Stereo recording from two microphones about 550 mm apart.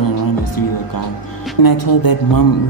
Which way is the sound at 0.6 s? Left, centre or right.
Left.